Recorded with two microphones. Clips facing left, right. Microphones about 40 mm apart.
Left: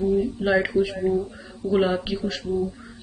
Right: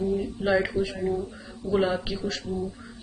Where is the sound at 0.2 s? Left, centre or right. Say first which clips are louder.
Left 3 dB; centre.